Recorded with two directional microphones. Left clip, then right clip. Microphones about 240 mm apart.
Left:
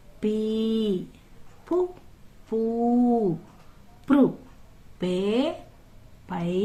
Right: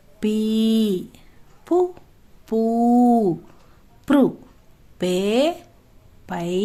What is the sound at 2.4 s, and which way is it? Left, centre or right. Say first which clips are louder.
Mantra: right 5 dB; right.